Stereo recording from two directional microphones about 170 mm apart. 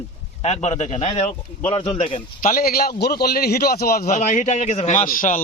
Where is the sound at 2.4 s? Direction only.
55° left (ahead or behind).